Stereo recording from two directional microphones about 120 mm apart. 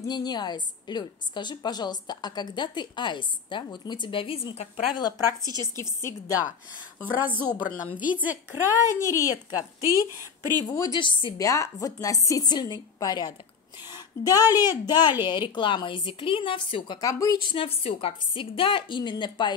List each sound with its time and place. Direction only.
0.0 s a woman's voice: 35° left (ahead or behind); by 4.8 s 55° left (ahead or behind)
4.9 s a woman's voice: 35° left (ahead or behind)
5.4 s a woman's voice: 35° right (ahead or behind)
6.0 s speech: 25° left (ahead or behind)
7.4 s speech: 20° left (ahead or behind)
8.7 s speech: 25° left (ahead or behind)
9.8 s a woman's voice: 25° right (ahead or behind)
10.7 s speech: 30° left (ahead or behind)
11.0 s a woman's voice: 45° left (ahead or behind)
11.3 s a woman's voice: 25° left (ahead or behind)
17.0 s speech: 30° left (ahead or behind)
17.5 s a woman's voice: 50° left (ahead or behind)